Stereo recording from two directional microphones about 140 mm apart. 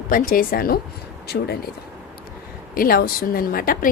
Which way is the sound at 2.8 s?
90° left.